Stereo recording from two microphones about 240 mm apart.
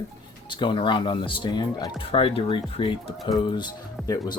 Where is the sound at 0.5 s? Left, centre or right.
Centre.